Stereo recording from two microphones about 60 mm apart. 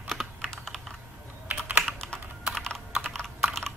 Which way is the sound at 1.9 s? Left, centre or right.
Centre.